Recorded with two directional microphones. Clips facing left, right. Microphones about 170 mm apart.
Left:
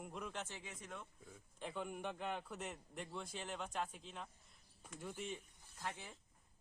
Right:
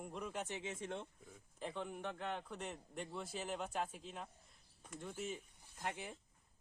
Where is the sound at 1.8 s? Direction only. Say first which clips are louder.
Even; 10° left (ahead or behind).